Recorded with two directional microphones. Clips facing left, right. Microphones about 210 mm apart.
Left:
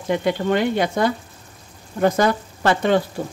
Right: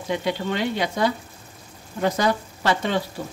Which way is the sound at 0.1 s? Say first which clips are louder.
Left 5 dB; 50° left (ahead or behind).